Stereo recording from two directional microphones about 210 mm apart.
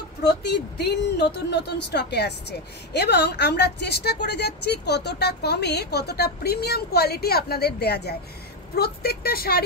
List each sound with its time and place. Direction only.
0.2 s speech: 50° left (ahead or behind)